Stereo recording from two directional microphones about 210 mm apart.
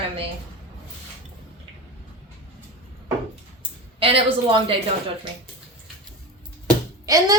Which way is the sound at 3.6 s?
25° right (ahead or behind).